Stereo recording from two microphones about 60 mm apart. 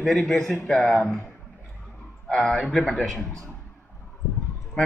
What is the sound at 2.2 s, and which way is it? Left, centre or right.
A man's voice, centre.